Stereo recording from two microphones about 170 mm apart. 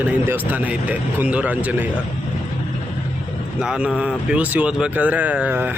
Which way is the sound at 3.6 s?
5° right (ahead or behind).